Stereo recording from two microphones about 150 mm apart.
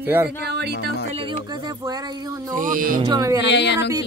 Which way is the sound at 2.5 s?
65° right (ahead or behind).